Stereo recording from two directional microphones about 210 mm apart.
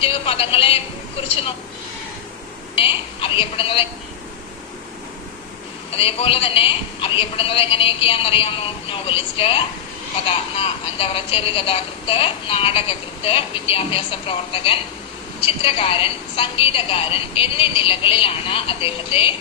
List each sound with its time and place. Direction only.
0.0 s speech: 25° left (ahead or behind)
2.7 s speech: 25° left (ahead or behind)
5.9 s speech: 25° left (ahead or behind)